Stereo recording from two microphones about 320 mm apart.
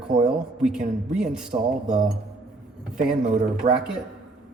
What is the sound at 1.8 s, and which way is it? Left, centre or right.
Speech, right.